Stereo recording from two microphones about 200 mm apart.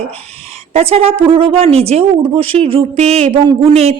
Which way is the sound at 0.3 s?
30° right (ahead or behind).